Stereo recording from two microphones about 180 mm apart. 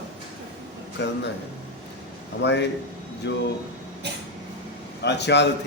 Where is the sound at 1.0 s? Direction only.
70° left (ahead or behind).